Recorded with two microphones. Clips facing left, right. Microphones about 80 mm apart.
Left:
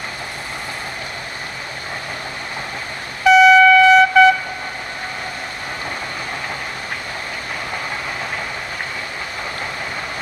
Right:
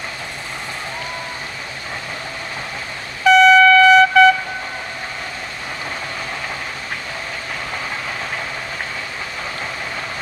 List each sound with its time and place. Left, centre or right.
3.3 s trumpet: centre